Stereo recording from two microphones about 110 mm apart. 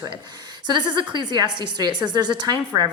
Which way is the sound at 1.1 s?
40° right (ahead or behind).